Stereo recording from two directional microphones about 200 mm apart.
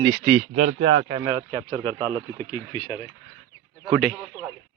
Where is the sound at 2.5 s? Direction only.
20° left (ahead or behind).